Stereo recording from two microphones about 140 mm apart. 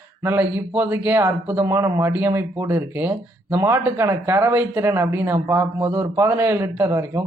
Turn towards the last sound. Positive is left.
turn(degrees=-20)  # may be behind; listen again after turning